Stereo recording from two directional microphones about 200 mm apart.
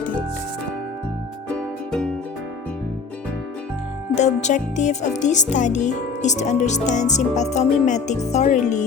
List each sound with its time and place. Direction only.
1.5 s music: 5° left (ahead or behind)
4.1 s music: 35° left (ahead or behind)